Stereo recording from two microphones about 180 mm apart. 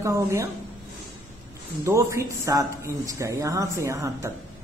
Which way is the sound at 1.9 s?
15° right (ahead or behind).